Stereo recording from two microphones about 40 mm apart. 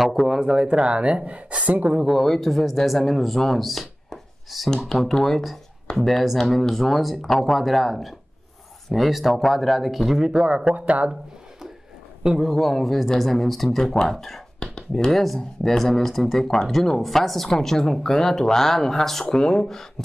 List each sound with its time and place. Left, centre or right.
0.0 s speech: centre
0.4 s speech: centre
2.2 s speech: centre
10.2 s speech: right
12.2 s speech: centre
12.5 s speech: centre
14.6 s a sound: centre
15.0 s speech: centre
19.2 s speech: centre